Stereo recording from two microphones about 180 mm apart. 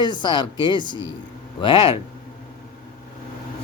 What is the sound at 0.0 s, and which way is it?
Speech, 25° left (ahead or behind).